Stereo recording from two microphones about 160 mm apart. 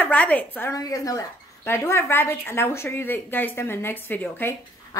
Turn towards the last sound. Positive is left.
turn(degrees=15)  # may be behind; listen again after turning